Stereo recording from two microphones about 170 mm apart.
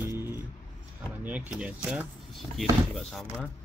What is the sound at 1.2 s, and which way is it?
Speech, 10° right (ahead or behind).